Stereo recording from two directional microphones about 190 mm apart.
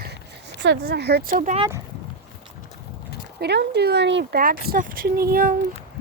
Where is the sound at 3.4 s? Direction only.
60° right (ahead or behind).